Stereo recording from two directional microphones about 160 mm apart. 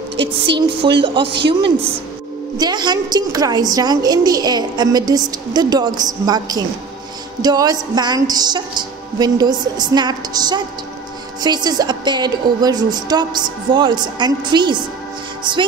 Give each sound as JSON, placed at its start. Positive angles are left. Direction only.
{"t": 0.4, "sound": "speech", "side_deg": -30}
{"t": 2.5, "sound": "a woman's voice", "side_deg": -25}